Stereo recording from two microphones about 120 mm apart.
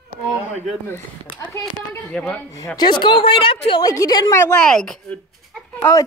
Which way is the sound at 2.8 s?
40° left (ahead or behind).